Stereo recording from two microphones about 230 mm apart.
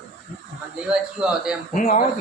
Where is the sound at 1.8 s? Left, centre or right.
Left.